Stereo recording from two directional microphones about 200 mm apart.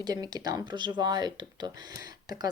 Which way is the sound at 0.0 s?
20° right (ahead or behind).